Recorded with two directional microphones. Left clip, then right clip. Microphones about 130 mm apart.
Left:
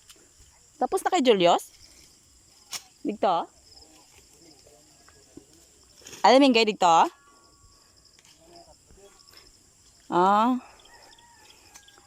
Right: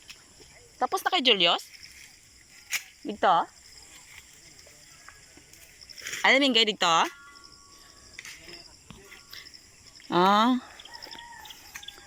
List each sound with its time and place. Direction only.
0.8 s speech: 60° left (ahead or behind)
3.1 s speech: 35° left (ahead or behind)
6.1 s speech: 50° left (ahead or behind)
10.1 s speech: 20° left (ahead or behind)